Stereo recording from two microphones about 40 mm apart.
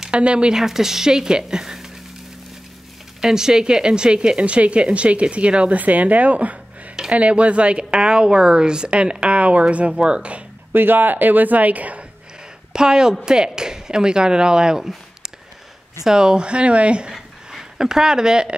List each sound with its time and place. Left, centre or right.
0.1 s a woman's voice: right
0.6 s a woman's voice: centre
3.2 s a woman's voice: centre
10.7 s speech: right
12.7 s a woman's voice: centre
16.0 s a woman's voice: centre
17.1 s a sound: centre